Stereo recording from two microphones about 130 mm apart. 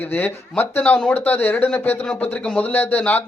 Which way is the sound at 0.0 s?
15° left (ahead or behind).